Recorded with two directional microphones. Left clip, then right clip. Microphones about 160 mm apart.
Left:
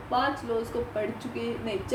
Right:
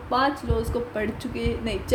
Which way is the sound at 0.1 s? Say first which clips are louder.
Right 3 dB; 90° right.